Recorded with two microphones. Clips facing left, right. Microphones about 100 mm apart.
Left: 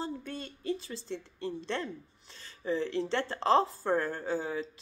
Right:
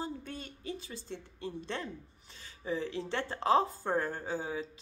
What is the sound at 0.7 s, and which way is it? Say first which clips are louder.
Speech: left 3 dB; 15° right (ahead or behind).